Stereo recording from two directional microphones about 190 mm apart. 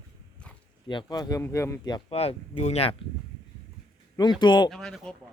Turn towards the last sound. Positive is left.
turn(degrees=0)  # may be behind; listen again after turning